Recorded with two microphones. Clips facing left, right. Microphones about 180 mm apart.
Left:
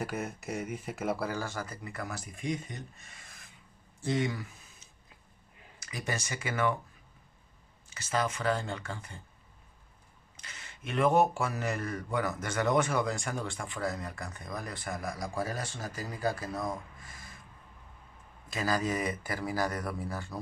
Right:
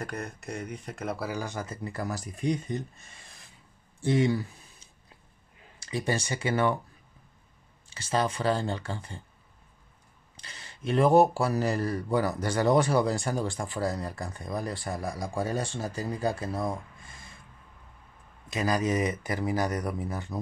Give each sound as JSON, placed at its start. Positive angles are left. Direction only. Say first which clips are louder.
{"t": 0.0, "sound": "speech", "louder": "left 1 dB", "side_deg": 0}
{"t": 1.3, "sound": "speech", "louder": "right 2 dB", "side_deg": -20}
{"t": 1.8, "sound": "speech", "louder": "right 6 dB", "side_deg": -35}
{"t": 7.9, "sound": "speech", "louder": "right 4 dB", "side_deg": -30}
{"t": 10.3, "sound": "speech", "louder": "right 2 dB", "side_deg": -30}
{"t": 18.5, "sound": "speech", "louder": "right 4 dB", "side_deg": -20}